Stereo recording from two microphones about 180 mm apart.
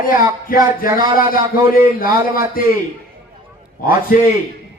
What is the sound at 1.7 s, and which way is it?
Speech, 50° left (ahead or behind).